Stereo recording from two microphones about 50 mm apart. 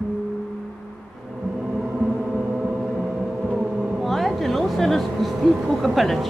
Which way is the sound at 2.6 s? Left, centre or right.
Centre.